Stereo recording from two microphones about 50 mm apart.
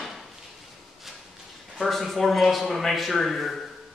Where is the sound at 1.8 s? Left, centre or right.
Centre.